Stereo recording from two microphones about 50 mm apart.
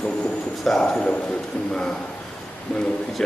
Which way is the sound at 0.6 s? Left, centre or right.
Centre.